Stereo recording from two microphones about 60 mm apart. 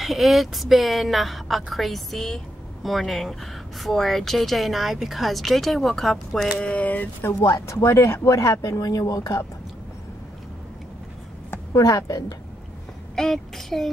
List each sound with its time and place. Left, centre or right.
0.0 s a woman's voice: centre
6.6 s speech: left
7.3 s speech: left
11.7 s a woman's voice: left
13.1 s speech: centre